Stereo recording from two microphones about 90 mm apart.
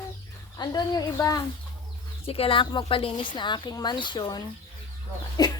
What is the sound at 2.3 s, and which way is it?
Speech, 90° left.